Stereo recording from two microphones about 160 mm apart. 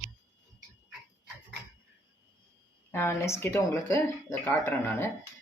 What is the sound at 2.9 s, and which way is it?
Speech, 15° left (ahead or behind).